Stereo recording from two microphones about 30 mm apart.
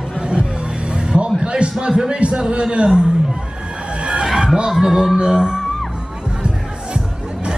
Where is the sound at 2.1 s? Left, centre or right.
Right.